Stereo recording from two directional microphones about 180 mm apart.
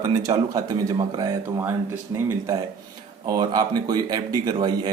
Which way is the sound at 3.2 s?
20° right (ahead or behind).